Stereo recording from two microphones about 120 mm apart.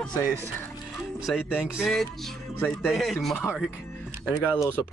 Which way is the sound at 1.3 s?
5° left (ahead or behind).